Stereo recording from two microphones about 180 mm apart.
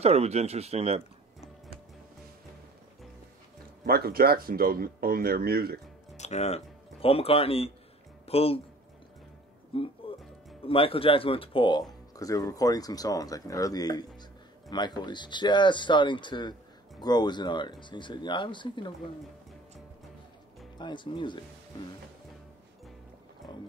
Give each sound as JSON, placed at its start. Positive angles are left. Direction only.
{"t": 0.0, "sound": "speech", "side_deg": -35}
{"t": 3.8, "sound": "speech", "side_deg": -60}
{"t": 6.1, "sound": "speech", "side_deg": 40}
{"t": 9.7, "sound": "speech", "side_deg": 30}
{"t": 20.7, "sound": "speech", "side_deg": 25}